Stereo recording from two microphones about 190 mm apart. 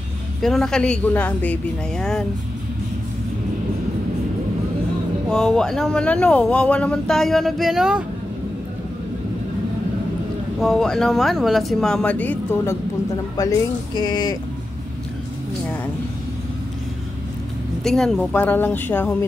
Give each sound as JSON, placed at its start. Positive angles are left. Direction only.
{"t": 0.4, "sound": "speech", "side_deg": 0}
{"t": 5.3, "sound": "speech", "side_deg": 5}
{"t": 10.6, "sound": "speech", "side_deg": 0}
{"t": 13.9, "sound": "speech", "side_deg": 20}
{"t": 17.8, "sound": "a woman's voice", "side_deg": 5}